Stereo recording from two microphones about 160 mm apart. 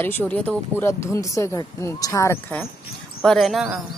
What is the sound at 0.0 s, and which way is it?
Speech, 10° left (ahead or behind).